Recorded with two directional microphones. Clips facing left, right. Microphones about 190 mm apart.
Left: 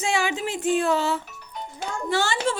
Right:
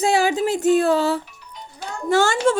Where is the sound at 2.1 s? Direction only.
45° right (ahead or behind).